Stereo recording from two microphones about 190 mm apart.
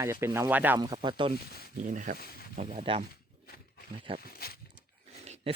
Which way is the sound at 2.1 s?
55° left (ahead or behind).